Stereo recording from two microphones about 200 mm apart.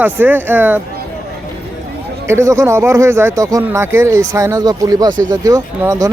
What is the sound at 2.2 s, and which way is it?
Speech, 15° right (ahead or behind).